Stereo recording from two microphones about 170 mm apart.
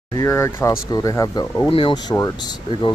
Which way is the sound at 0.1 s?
15° left (ahead or behind).